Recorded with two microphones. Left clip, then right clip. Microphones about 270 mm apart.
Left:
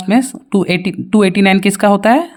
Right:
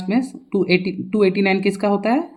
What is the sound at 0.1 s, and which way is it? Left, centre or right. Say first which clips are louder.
A woman's voice: left 7 dB; left.